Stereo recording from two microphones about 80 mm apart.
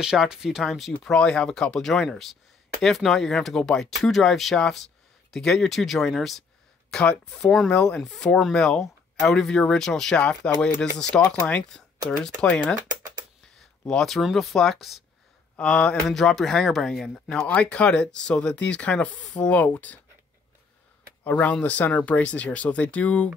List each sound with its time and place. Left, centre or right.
0.0 s speech: centre
6.9 s speech: centre
12.4 s speech: left
13.8 s speech: centre
15.5 s speech: centre
17.5 s speech: centre
21.2 s speech: centre